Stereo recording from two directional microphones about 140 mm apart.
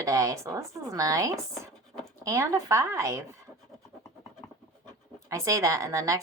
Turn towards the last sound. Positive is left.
turn(degrees=-25)  # may be behind; listen again after turning